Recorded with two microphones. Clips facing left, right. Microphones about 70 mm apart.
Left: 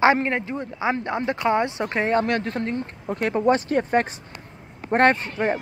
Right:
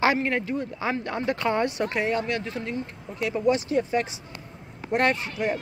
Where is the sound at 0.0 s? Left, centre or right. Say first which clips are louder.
Left 4 dB; left.